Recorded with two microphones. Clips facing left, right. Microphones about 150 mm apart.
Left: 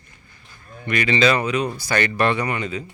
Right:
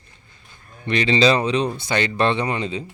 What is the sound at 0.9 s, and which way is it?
Speech, 25° right (ahead or behind).